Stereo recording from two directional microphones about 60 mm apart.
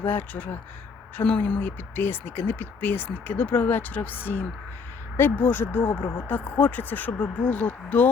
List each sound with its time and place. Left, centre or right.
0.0 s a woman's voice: left
2.0 s speech: left